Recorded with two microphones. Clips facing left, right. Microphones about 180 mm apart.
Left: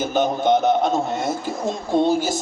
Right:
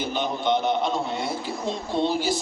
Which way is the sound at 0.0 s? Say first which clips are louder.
Left 6 dB; 45° left (ahead or behind).